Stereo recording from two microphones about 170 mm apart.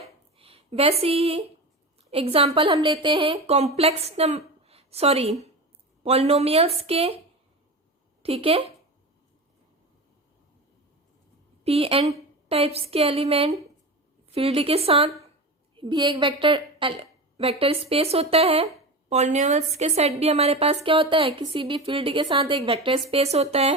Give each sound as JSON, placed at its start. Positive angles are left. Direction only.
{"t": 0.0, "sound": "a sound", "side_deg": -35}
{"t": 2.0, "sound": "a woman's voice", "side_deg": -35}
{"t": 8.2, "sound": "a woman's voice", "side_deg": -35}
{"t": 11.6, "sound": "a woman's voice", "side_deg": -35}